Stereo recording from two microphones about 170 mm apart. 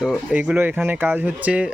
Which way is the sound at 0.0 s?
5° right (ahead or behind).